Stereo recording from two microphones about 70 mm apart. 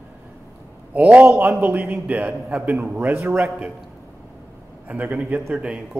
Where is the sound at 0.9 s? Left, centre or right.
Centre.